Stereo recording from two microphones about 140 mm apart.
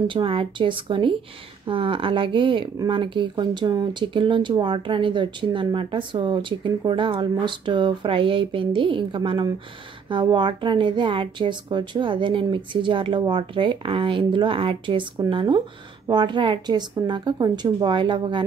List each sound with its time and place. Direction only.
0.0 s speech: 35° right (ahead or behind)